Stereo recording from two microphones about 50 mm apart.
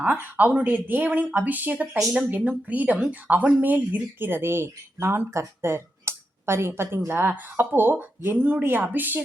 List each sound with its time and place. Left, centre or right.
0.0 s speech: right
8.4 s speech: right